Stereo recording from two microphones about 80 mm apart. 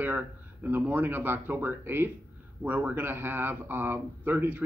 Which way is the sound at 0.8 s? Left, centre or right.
Right.